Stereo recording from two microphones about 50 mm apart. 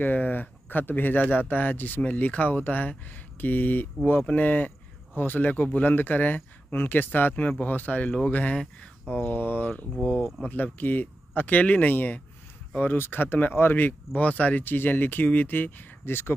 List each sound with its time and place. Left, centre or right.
0.0 s speech: left
14.1 s speech: left